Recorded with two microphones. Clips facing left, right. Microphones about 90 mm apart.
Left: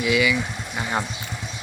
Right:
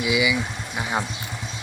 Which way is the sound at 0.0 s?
15° right (ahead or behind).